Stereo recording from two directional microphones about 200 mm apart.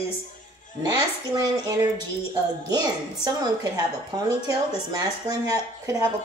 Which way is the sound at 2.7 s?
20° right (ahead or behind).